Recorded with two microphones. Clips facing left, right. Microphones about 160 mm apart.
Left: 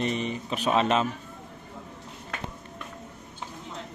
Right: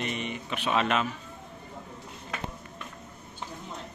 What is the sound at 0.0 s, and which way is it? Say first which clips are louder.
Speech: left 5 dB; 35° left (ahead or behind).